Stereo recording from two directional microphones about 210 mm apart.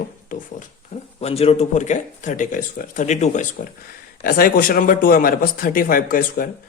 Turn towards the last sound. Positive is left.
turn(degrees=45)  # may be behind; listen again after turning